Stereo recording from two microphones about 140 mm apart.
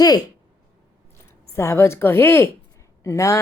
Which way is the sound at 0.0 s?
30° left (ahead or behind).